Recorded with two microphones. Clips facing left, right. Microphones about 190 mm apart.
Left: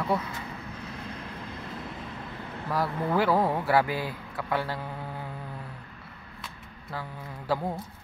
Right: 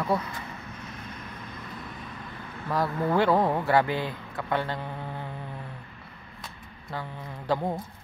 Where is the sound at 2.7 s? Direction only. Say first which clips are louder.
Right 2 dB; 5° left (ahead or behind).